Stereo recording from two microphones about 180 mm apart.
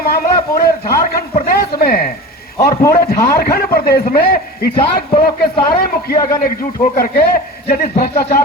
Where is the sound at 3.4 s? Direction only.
55° left (ahead or behind).